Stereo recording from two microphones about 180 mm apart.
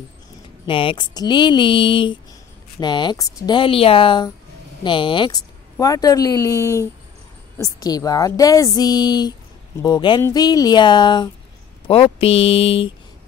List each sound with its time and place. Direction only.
0.7 s speech: 30° left (ahead or behind)